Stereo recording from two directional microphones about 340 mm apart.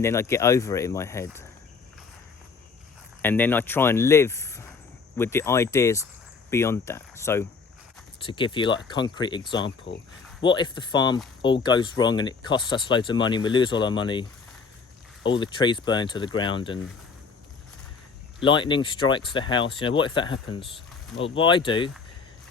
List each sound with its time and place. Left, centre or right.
0.0 s speech: centre
3.2 s speech: centre
9.6 s speech: left
10.4 s speech: centre
15.4 s speech: centre
18.4 s speech: centre